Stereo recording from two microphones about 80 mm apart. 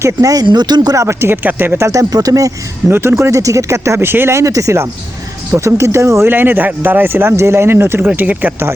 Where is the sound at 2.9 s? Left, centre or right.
Right.